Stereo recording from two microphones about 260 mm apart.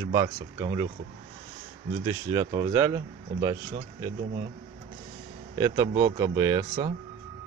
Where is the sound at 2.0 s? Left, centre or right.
Centre.